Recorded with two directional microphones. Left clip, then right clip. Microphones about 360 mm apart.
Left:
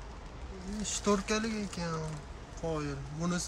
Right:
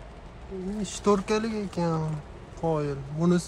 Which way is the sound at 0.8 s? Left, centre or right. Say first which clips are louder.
Right 6 dB; centre.